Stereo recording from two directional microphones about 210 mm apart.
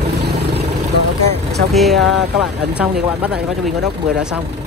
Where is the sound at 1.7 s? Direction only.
Centre (ahead or behind).